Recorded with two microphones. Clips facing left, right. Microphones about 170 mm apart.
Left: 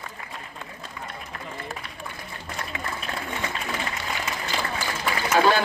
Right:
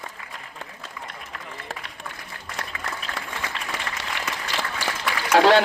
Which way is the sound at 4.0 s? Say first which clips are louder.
Left 1 dB; 90° right.